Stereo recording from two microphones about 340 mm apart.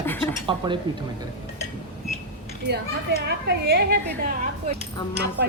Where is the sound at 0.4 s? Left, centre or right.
Centre.